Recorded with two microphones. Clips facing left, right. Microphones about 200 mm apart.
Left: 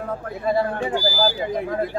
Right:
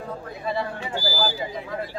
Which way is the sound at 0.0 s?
50° left (ahead or behind).